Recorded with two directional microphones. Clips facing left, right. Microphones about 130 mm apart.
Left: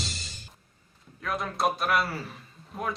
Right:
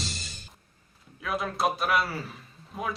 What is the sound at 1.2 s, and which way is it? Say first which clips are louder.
A man's voice: right 1 dB; centre (ahead or behind).